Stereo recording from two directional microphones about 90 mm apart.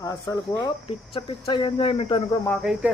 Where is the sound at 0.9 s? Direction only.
75° left (ahead or behind).